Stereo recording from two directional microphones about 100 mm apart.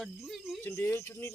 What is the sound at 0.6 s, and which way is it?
Speech, 25° left (ahead or behind).